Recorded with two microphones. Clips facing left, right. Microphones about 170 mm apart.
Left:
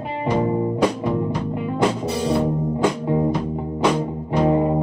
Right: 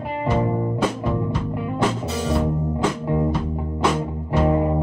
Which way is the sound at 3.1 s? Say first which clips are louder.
Even; 30° left (ahead or behind).